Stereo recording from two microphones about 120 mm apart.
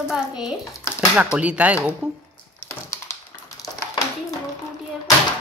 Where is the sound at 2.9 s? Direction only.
25° left (ahead or behind).